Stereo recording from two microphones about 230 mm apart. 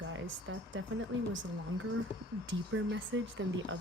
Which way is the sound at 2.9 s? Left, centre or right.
Right.